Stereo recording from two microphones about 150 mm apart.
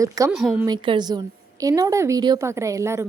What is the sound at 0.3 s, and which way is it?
Speech, 5° right (ahead or behind).